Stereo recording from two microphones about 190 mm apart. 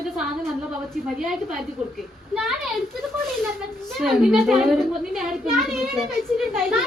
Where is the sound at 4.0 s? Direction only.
5° right (ahead or behind).